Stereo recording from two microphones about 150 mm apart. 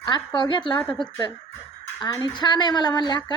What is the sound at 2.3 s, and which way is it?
Speech, 30° left (ahead or behind).